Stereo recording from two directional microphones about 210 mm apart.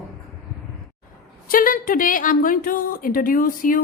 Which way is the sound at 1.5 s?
40° left (ahead or behind).